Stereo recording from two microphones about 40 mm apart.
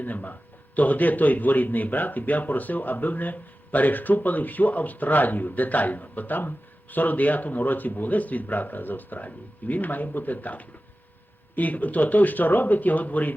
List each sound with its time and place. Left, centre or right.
0.0 s speech: left